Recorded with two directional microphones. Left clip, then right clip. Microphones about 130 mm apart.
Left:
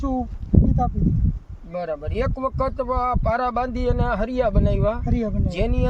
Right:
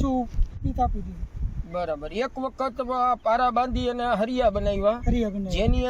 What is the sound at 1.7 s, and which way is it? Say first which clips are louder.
Speech: left 1 dB; 20° left (ahead or behind).